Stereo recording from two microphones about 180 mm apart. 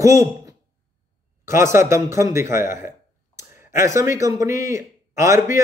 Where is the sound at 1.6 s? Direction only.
15° right (ahead or behind).